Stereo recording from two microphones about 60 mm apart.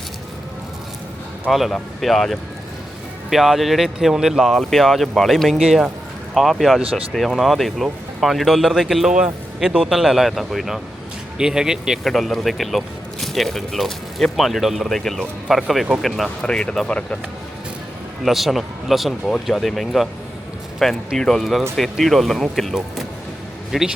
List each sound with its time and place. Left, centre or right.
1.5 s speech: centre
12.0 s speech: centre
16.5 s speech: centre
18.2 s speech: centre
23.7 s speech: centre